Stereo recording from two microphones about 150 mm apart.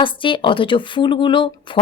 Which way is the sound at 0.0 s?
35° left (ahead or behind).